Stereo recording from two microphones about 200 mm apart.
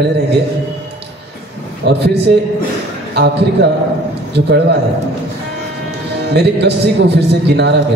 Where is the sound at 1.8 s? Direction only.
55° right (ahead or behind).